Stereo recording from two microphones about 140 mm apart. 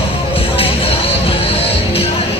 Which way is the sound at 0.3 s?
40° left (ahead or behind).